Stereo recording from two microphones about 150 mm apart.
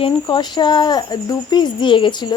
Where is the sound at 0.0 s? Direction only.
30° left (ahead or behind).